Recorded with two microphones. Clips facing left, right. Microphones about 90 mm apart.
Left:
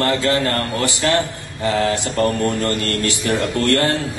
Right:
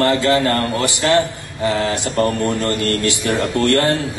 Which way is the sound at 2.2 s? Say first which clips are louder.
Even; 20° right (ahead or behind).